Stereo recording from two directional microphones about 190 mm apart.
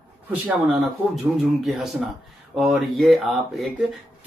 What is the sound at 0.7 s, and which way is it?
Speech, centre (ahead or behind).